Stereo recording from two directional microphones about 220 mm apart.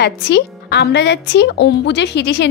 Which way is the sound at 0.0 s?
50° left (ahead or behind).